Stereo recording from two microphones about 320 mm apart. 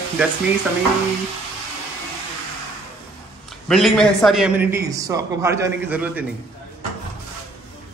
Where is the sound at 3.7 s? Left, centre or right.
Centre.